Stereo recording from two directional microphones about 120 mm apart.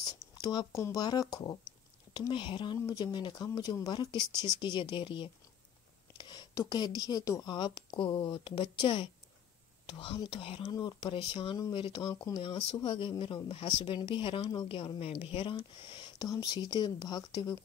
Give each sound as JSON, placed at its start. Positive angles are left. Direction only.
{"t": 0.0, "sound": "a sound", "side_deg": 35}
{"t": 0.7, "sound": "speech", "side_deg": 25}
{"t": 10.7, "sound": "speech", "side_deg": 35}
{"t": 12.4, "sound": "speech", "side_deg": 45}
{"t": 16.3, "sound": "speech", "side_deg": 30}